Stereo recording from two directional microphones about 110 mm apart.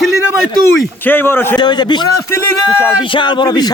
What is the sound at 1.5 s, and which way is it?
A man's voice, 40° left (ahead or behind).